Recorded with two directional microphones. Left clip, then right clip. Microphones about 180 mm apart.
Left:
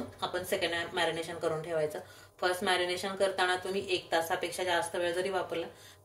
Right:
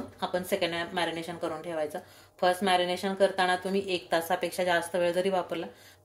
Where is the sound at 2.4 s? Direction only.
35° right (ahead or behind).